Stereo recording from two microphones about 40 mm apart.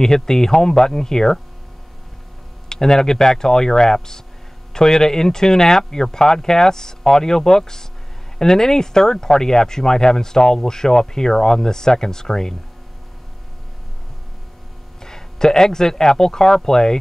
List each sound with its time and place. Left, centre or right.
0.0 s speech: centre
2.7 s speech: centre
15.0 s speech: centre